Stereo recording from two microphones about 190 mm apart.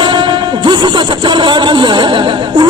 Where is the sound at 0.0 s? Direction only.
25° right (ahead or behind).